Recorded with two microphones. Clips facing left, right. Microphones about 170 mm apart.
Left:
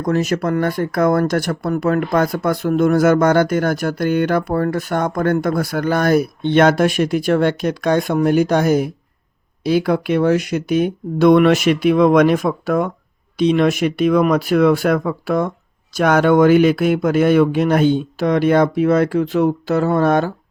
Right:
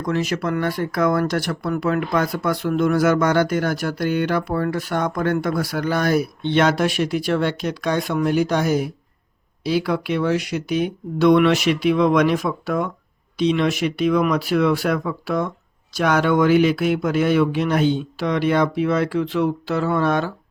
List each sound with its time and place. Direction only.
0.0 s speech: 45° left (ahead or behind)